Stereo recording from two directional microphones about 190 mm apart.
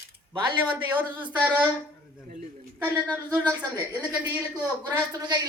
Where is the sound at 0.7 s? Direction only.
10° right (ahead or behind).